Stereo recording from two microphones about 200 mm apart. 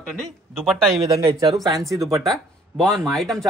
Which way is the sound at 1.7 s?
Centre (ahead or behind).